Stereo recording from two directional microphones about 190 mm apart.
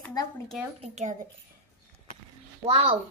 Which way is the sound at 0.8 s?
35° right (ahead or behind).